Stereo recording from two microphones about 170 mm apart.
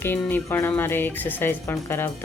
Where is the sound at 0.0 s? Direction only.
10° left (ahead or behind).